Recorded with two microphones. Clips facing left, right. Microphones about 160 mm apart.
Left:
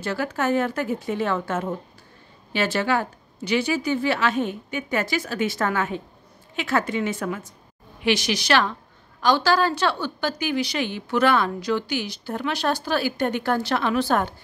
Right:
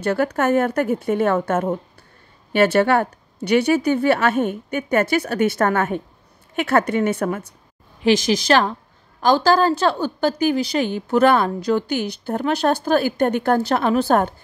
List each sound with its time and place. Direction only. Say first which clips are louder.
0.0 s a woman's voice: right 6 dB; 55° right (ahead or behind)